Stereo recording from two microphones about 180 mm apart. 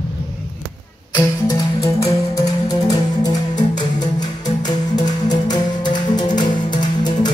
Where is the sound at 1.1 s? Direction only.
20° left (ahead or behind).